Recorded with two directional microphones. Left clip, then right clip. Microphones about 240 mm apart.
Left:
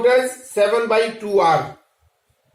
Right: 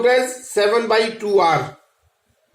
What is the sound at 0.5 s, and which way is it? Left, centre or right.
Speech, right.